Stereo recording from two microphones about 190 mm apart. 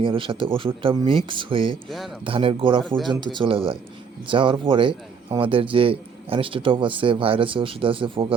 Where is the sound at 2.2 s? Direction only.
30° right (ahead or behind).